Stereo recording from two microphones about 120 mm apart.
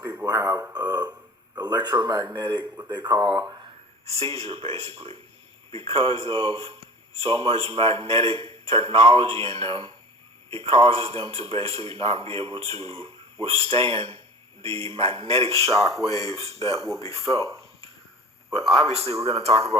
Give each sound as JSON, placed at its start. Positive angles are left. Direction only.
{"t": 0.3, "sound": "speech", "side_deg": -35}
{"t": 0.7, "sound": "a sound", "side_deg": -35}
{"t": 2.3, "sound": "speech", "side_deg": -35}
{"t": 4.0, "sound": "a man's voice", "side_deg": -55}
{"t": 15.8, "sound": "a man's voice", "side_deg": 0}
{"t": 16.3, "sound": "speech", "side_deg": -55}
{"t": 18.5, "sound": "a man's voice", "side_deg": 0}
{"t": 18.9, "sound": "speech", "side_deg": -60}